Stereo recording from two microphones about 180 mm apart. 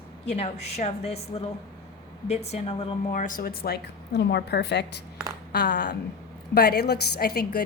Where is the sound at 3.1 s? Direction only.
45° left (ahead or behind).